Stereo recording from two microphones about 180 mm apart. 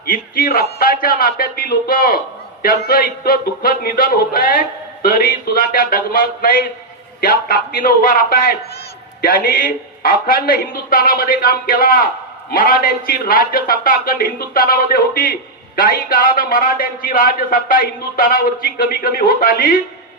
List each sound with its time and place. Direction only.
0.0 s a man's voice: 55° left (ahead or behind)